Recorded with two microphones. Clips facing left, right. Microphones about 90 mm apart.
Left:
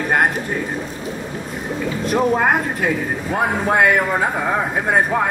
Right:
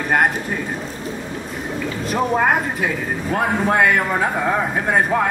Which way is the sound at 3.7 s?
10° left (ahead or behind).